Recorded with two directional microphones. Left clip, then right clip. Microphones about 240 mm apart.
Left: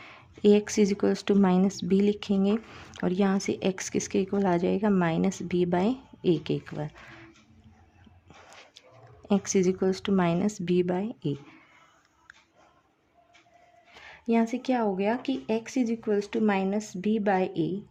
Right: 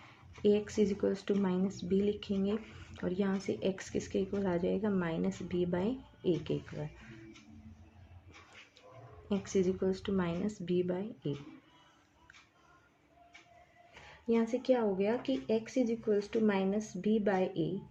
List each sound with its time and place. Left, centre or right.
0.4 s speech: left
9.3 s speech: left
14.3 s speech: left